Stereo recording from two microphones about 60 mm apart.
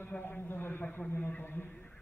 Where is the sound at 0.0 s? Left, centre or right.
Left.